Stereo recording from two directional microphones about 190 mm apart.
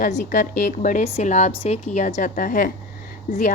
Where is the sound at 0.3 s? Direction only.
40° left (ahead or behind).